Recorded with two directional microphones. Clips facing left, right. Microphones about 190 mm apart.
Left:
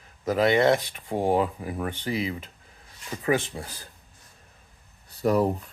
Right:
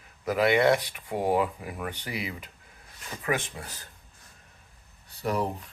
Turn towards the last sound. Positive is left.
turn(degrees=40)  # may be behind; listen again after turning